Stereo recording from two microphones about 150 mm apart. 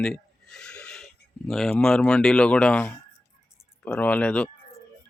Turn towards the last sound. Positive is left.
turn(degrees=10)  # may be behind; listen again after turning